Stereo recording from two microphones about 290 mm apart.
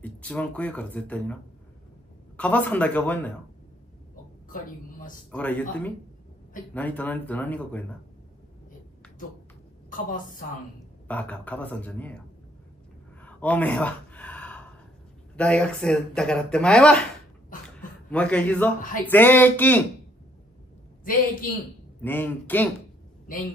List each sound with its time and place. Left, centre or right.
0.0 s speech: centre
4.5 s speech: left
5.3 s speech: centre
9.8 s a woman's voice: left
11.1 s speech: centre
13.2 s gasp: centre
15.3 s speech: centre
17.6 s a sound: centre
18.8 s speech: left
19.0 s a sound: centre
22.0 s a sound: centre